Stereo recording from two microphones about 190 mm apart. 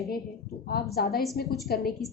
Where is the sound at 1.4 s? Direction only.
50° left (ahead or behind).